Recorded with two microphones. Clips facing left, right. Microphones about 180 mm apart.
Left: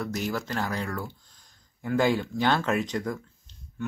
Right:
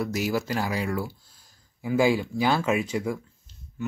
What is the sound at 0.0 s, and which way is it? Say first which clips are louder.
Speech: right 4 dB; 10° right (ahead or behind).